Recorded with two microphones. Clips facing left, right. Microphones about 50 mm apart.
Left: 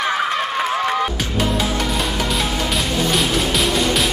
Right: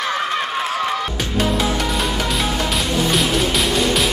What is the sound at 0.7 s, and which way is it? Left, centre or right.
Music, centre.